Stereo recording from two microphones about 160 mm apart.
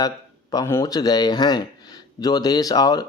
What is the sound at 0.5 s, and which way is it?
Speech, 20° left (ahead or behind).